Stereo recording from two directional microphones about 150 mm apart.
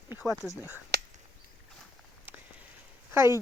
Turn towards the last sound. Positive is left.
turn(degrees=-15)  # may be behind; listen again after turning